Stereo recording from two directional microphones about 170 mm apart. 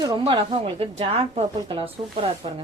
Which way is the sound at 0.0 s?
30° right (ahead or behind).